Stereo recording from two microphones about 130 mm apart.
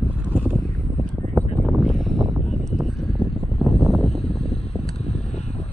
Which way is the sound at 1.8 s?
Centre (ahead or behind).